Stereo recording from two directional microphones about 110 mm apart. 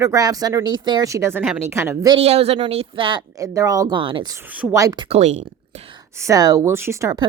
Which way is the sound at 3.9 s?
50° right (ahead or behind).